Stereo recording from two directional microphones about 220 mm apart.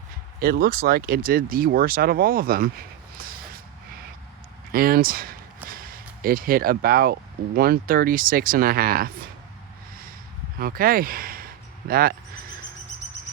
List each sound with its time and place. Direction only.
0.3 s speech: 45° right (ahead or behind)
3.2 s a sound: 40° right (ahead or behind)
4.7 s speech: 40° right (ahead or behind)
10.6 s speech: 40° right (ahead or behind)